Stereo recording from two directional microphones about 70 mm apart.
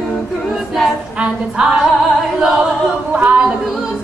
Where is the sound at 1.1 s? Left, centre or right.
Centre.